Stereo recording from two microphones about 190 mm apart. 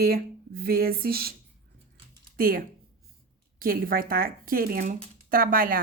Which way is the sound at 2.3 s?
50° right (ahead or behind).